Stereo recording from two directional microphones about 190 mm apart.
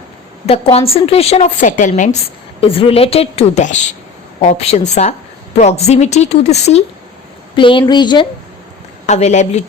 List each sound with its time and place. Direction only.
0.4 s a woman's voice: 30° left (ahead or behind)
2.6 s a woman's voice: 30° left (ahead or behind)
9.0 s a woman's voice: 35° left (ahead or behind)